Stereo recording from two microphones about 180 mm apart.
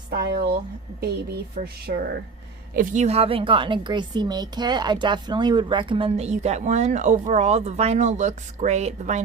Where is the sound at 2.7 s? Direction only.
45° right (ahead or behind).